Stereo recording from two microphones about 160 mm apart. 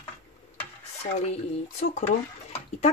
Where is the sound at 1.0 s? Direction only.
45° left (ahead or behind).